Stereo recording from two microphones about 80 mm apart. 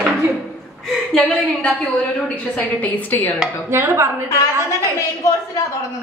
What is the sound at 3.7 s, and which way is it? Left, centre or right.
Speech, right.